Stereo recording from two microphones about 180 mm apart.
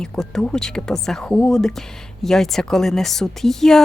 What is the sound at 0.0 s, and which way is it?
Speech, 5° left (ahead or behind).